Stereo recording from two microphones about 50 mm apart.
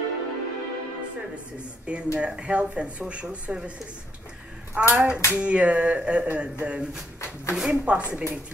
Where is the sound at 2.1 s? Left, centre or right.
Right.